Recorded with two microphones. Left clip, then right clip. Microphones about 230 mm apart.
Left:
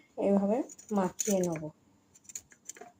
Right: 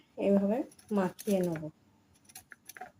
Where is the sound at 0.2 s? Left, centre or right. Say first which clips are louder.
Even; centre.